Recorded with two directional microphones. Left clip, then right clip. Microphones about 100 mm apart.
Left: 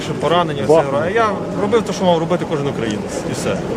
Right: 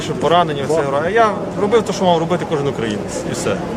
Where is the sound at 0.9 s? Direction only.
10° right (ahead or behind).